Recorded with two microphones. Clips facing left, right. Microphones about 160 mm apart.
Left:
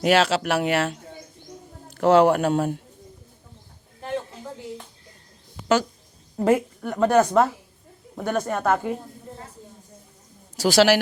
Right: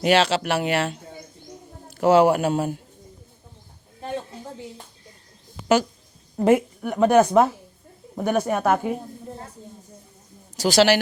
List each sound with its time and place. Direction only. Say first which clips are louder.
0.0 s speech: even; centre (ahead or behind)
6.4 s a woman's voice: right 2 dB; 15° right (ahead or behind)
10.6 s speech: even; 5° left (ahead or behind)